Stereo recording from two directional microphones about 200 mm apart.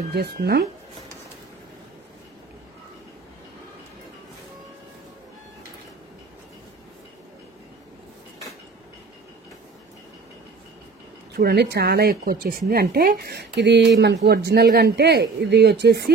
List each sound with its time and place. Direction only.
0.1 s speech: 55° right (ahead or behind)
11.3 s speech: 50° right (ahead or behind)